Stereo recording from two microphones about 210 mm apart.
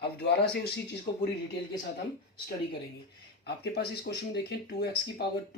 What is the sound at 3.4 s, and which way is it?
Speech, 50° left (ahead or behind).